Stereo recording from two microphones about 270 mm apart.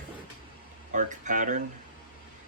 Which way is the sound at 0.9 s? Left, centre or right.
Right.